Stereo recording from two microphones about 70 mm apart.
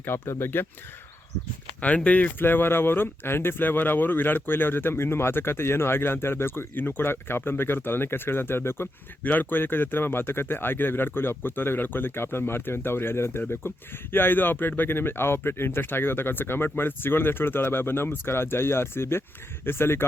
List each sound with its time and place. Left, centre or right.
0.0 s speech: left
2.0 s speech: centre
2.4 s speech: left